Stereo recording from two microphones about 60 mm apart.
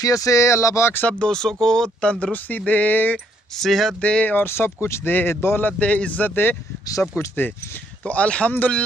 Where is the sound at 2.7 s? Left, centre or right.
Left.